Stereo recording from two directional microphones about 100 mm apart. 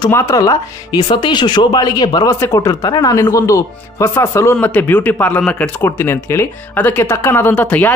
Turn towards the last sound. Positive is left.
turn(degrees=20)  # may be behind; listen again after turning